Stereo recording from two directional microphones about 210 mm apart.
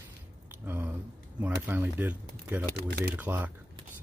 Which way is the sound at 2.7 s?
50° right (ahead or behind).